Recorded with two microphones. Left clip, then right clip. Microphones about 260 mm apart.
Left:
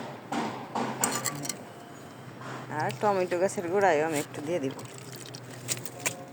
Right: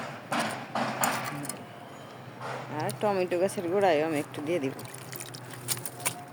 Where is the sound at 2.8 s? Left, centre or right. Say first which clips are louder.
Left 2 dB; centre.